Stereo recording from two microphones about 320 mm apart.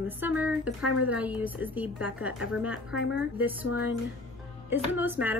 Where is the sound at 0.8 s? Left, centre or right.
Left.